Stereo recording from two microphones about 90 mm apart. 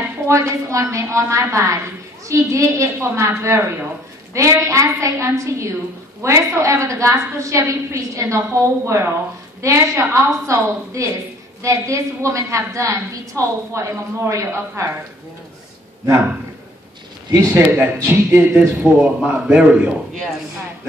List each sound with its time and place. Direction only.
0.3 s a woman's voice: 35° right (ahead or behind)
17.4 s a man's voice: 25° right (ahead or behind)